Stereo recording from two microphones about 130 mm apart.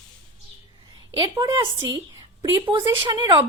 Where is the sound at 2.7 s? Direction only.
35° right (ahead or behind).